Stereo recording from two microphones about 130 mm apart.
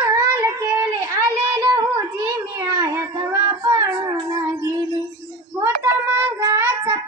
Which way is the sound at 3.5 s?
35° right (ahead or behind).